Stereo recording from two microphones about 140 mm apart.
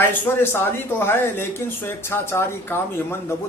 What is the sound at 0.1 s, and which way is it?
Speech, 15° left (ahead or behind).